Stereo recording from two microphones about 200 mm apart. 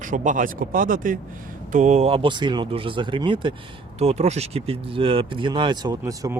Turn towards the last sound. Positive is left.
turn(degrees=-15)  # may be behind; listen again after turning